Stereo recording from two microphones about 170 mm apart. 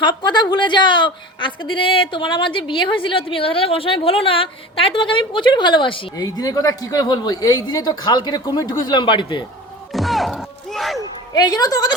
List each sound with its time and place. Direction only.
0.0 s a woman's voice: 25° left (ahead or behind)
9.9 s music: centre (ahead or behind)
11.3 s a woman's voice: 20° left (ahead or behind)